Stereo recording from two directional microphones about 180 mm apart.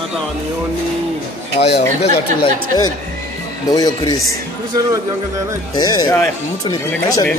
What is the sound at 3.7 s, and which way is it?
Speech, 20° left (ahead or behind).